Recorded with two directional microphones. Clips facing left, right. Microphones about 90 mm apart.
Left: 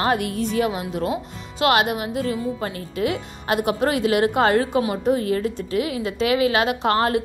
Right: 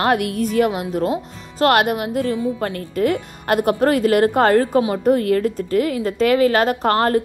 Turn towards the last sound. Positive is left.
turn(degrees=-40)  # may be behind; listen again after turning